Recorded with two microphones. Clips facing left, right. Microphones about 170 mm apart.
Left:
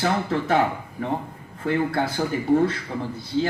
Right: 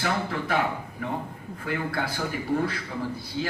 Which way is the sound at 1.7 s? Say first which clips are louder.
Left 7 dB; 25° left (ahead or behind).